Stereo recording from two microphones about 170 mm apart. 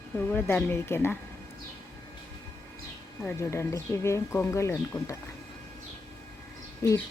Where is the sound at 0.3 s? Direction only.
10° left (ahead or behind).